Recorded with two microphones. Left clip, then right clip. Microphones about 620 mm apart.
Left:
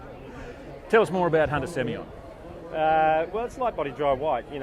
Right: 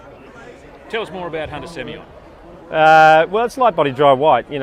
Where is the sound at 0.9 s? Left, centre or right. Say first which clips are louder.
Left 3 dB; left.